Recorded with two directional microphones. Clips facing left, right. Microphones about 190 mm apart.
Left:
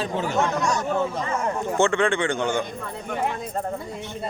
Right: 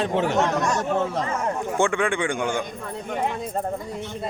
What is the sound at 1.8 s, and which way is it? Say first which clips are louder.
Speech: left 2 dB; 10° right (ahead or behind).